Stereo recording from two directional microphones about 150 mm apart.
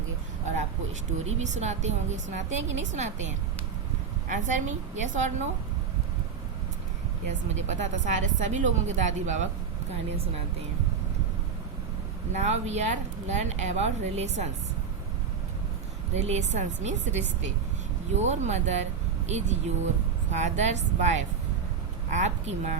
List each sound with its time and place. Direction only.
1.2 s speech: 50° right (ahead or behind)
4.3 s a woman's voice: 55° right (ahead or behind)
7.7 s speech: 55° right (ahead or behind)
12.3 s speech: 50° right (ahead or behind)
16.2 s speech: 50° right (ahead or behind)